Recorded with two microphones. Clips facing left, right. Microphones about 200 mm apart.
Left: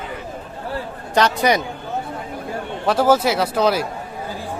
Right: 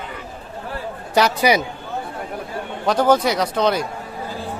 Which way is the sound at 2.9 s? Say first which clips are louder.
Even; 5° left (ahead or behind).